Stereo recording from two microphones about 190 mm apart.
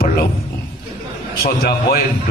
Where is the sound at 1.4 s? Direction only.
55° left (ahead or behind).